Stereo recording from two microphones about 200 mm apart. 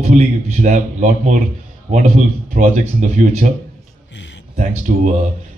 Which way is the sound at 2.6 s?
35° right (ahead or behind).